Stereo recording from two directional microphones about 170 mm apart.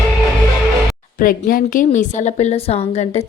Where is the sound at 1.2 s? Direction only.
55° left (ahead or behind).